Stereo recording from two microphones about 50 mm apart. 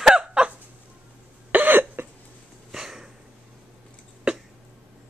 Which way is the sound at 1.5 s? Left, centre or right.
Right.